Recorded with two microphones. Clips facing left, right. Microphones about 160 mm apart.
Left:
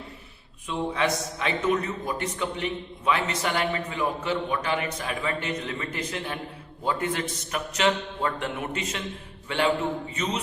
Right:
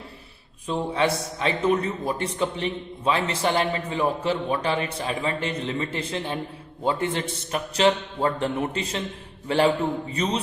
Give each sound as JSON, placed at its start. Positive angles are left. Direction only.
{"t": 0.7, "sound": "a man's voice", "side_deg": -30}